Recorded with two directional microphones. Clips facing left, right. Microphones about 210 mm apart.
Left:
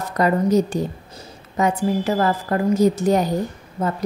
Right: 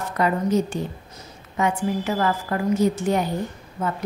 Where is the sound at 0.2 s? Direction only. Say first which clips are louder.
Left 4 dB; 40° left (ahead or behind).